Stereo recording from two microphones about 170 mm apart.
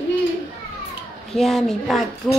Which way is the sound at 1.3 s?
Centre (ahead or behind).